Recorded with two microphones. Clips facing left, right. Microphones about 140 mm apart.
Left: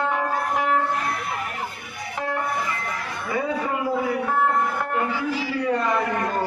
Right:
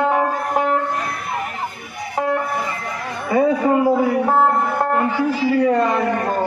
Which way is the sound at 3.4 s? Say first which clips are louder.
Right 10 dB; 40° right (ahead or behind).